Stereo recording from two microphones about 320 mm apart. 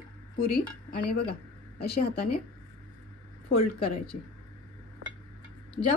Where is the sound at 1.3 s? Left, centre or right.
Left.